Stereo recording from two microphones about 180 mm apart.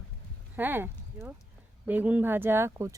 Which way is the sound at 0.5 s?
10° right (ahead or behind).